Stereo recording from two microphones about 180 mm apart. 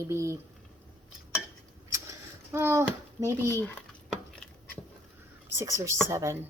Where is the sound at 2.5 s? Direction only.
15° right (ahead or behind).